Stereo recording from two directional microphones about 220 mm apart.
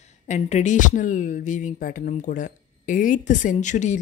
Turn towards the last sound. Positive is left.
turn(degrees=35)  # may be behind; listen again after turning